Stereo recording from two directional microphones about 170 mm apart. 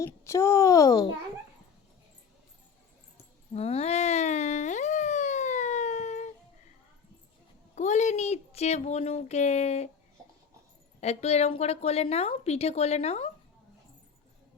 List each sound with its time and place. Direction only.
0.0 s a child's voice: 15° left (ahead or behind)
3.5 s a sound: 35° left (ahead or behind)
7.8 s a woman's voice: 45° left (ahead or behind)
11.0 s a woman's voice: 40° left (ahead or behind)